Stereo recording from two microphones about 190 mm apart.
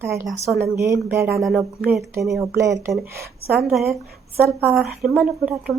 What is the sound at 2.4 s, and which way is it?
Speech, 15° right (ahead or behind).